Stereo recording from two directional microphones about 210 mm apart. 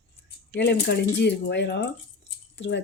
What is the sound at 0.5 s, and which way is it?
Speech, 55° left (ahead or behind).